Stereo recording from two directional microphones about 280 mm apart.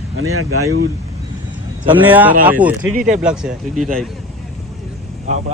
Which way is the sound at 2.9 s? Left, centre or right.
Right.